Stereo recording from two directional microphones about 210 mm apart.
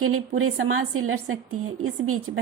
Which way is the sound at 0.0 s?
90° right.